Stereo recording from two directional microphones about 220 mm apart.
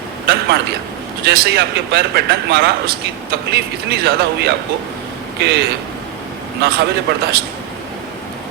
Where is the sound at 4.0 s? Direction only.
45° right (ahead or behind).